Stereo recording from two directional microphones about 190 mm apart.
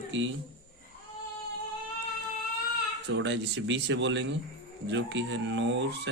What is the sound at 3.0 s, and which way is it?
Speech, 70° right (ahead or behind).